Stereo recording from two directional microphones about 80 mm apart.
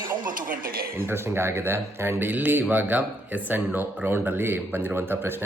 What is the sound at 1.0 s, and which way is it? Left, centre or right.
Speech, right.